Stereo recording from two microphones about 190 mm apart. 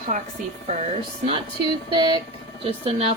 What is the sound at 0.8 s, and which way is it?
A woman's voice, 30° right (ahead or behind).